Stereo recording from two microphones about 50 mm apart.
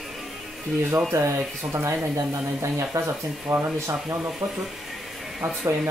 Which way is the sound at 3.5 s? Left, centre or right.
Right.